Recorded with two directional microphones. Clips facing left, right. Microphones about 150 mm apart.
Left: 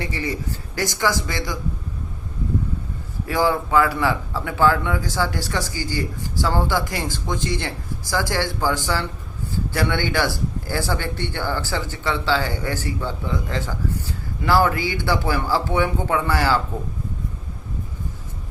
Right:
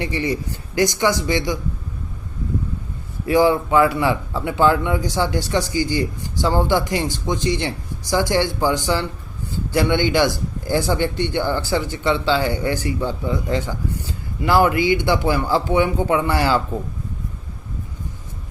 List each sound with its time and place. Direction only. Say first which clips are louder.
0.0 s speech: right 4 dB; 20° right (ahead or behind)
3.2 s speech: right 5 dB; 20° right (ahead or behind)